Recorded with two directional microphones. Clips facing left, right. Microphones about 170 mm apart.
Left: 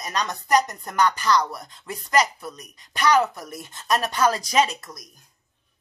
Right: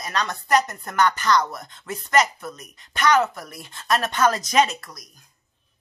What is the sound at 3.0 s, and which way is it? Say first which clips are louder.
Speech: even; 15° left (ahead or behind).